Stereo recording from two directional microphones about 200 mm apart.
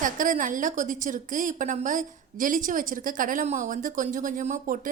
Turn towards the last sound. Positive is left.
turn(degrees=-40)  # may be behind; listen again after turning